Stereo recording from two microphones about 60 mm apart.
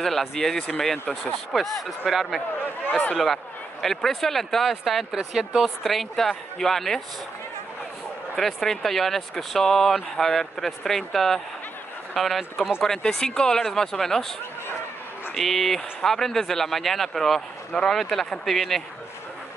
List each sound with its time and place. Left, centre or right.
0.0 s speech: centre
2.9 s speech: left
3.8 s speech: centre
8.4 s speech: centre
15.3 s speech: centre